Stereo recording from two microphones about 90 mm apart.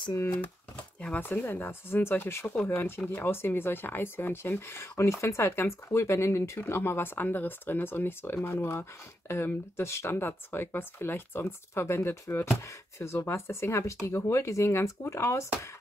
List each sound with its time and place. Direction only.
1.0 s speech: 15° left (ahead or behind)